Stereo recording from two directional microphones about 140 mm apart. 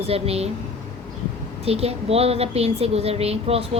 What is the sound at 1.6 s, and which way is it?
A woman's voice, 45° right (ahead or behind).